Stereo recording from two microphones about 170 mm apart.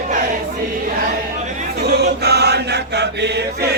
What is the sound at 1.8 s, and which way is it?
Chant, 70° right (ahead or behind).